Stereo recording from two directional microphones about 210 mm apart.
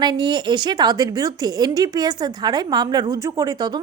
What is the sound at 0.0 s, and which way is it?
Speech, 20° right (ahead or behind).